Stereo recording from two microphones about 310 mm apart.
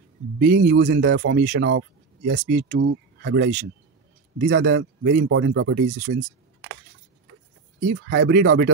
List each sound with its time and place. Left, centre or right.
0.4 s speech: right
7.9 s speech: right